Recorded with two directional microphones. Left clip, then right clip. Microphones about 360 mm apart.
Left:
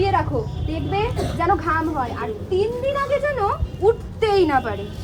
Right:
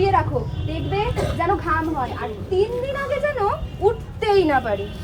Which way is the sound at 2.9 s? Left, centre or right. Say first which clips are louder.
Left 2 dB; centre.